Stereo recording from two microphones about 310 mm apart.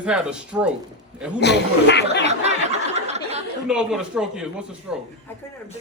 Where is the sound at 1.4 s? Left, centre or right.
Left.